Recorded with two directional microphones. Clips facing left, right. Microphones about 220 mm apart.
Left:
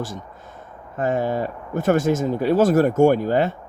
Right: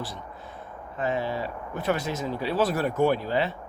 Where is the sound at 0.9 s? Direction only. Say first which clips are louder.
Left 6 dB; 45° left (ahead or behind).